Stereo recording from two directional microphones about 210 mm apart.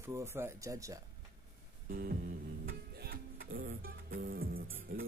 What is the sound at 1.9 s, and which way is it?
Music, 45° right (ahead or behind).